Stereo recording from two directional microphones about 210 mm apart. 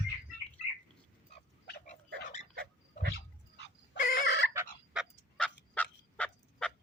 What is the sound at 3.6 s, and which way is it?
Dog, 55° left (ahead or behind).